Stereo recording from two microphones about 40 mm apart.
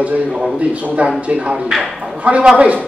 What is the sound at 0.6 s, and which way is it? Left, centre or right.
A man's voice, right.